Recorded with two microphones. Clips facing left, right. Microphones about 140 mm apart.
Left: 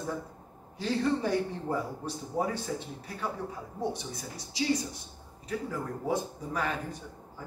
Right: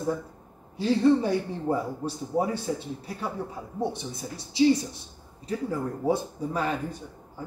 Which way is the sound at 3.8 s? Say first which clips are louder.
Right 4 dB; 25° right (ahead or behind).